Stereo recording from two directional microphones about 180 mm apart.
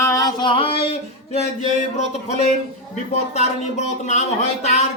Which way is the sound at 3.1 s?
40° left (ahead or behind).